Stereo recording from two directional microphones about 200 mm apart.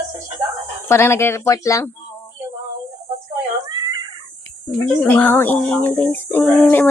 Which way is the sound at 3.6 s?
20° right (ahead or behind).